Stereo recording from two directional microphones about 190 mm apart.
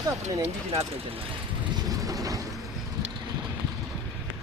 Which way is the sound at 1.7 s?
20° right (ahead or behind).